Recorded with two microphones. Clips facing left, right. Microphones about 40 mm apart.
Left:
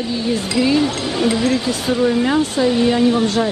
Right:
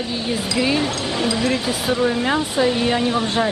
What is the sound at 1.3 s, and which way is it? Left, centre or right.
Speech, right.